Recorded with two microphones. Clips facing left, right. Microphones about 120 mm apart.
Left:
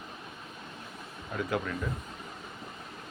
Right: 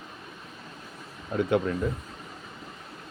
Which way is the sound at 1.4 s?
25° right (ahead or behind).